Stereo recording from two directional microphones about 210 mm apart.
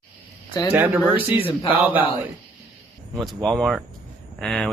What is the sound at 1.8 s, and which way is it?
Speech, 10° right (ahead or behind).